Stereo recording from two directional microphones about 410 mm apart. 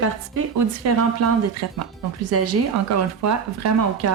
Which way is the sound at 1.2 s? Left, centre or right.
Right.